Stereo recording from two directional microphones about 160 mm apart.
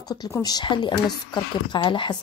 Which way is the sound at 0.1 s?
25° left (ahead or behind).